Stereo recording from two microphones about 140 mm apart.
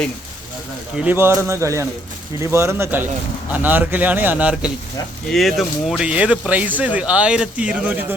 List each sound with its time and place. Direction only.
1.0 s speech: 15° right (ahead or behind)